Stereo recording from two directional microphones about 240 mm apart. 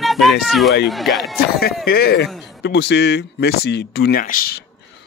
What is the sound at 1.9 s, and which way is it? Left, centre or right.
Speech, left.